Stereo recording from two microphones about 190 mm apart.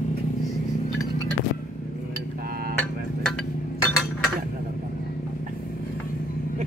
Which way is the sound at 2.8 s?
5° left (ahead or behind).